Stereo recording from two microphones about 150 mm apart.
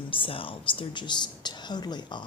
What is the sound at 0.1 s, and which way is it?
Speech, 35° left (ahead or behind).